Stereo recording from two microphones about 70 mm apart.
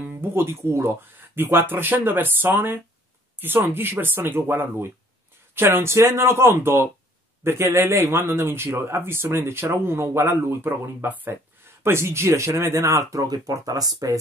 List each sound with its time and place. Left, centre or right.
0.0 s speech: right
11.8 s speech: right
13.1 s speech: right